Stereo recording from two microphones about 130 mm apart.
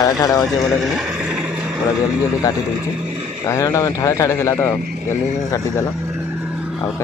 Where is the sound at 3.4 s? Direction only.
25° left (ahead or behind).